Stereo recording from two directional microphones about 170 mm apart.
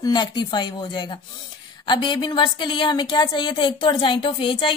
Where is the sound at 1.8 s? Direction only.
25° left (ahead or behind).